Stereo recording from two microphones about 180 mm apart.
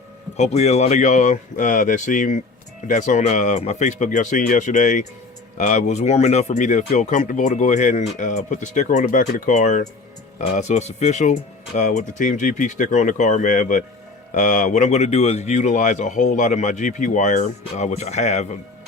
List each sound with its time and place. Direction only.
0.3 s speech: 40° left (ahead or behind)